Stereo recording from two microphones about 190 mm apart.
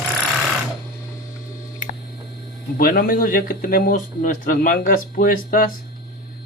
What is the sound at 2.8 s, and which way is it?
Speech, 50° left (ahead or behind).